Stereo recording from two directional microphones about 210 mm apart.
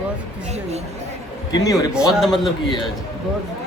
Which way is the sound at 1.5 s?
15° left (ahead or behind).